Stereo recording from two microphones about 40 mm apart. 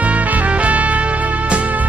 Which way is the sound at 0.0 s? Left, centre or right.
Right.